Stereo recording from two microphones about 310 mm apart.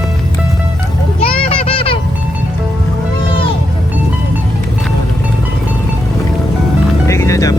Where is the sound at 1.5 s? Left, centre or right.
Centre.